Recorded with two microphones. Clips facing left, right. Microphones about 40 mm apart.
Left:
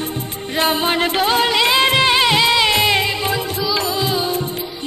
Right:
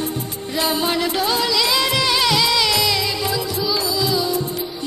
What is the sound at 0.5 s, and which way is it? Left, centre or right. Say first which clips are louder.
Music: left 3 dB; left.